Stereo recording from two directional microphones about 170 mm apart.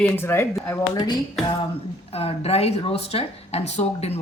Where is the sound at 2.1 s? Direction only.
35° left (ahead or behind).